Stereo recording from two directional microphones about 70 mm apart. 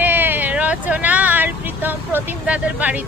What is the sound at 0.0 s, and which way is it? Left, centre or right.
Vehicle, right.